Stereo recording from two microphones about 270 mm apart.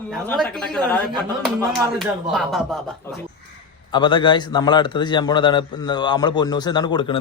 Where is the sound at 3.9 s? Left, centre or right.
Centre.